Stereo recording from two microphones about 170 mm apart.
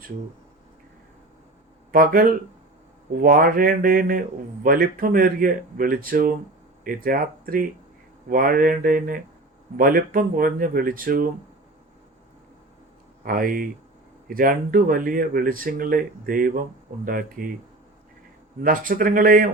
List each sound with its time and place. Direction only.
1.9 s speech: 55° right (ahead or behind)
13.2 s speech: 55° right (ahead or behind)
18.6 s speech: 55° right (ahead or behind)